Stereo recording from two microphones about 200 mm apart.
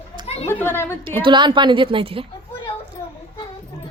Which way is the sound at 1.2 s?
25° right (ahead or behind).